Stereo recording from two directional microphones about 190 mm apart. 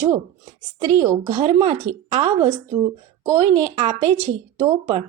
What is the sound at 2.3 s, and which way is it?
Speech, 20° right (ahead or behind).